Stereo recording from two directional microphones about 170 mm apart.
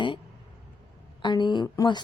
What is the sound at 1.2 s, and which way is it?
Speech, 25° left (ahead or behind).